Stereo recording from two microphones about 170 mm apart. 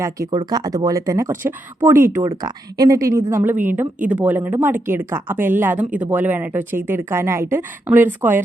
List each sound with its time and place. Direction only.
0.0 s speech: 20° right (ahead or behind)